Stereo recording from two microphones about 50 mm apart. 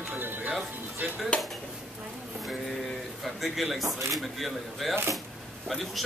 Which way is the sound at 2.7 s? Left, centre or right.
Centre.